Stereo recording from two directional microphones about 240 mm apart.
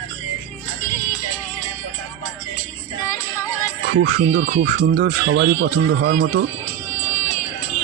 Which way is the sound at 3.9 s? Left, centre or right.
Right.